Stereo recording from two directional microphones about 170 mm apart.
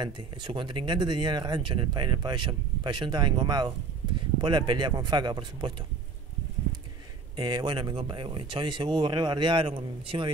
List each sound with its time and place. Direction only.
0.0 s speech: 30° right (ahead or behind)
7.3 s speech: 25° right (ahead or behind)